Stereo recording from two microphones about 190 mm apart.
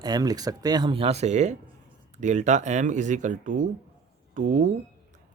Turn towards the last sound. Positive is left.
turn(degrees=-45)  # may be behind; listen again after turning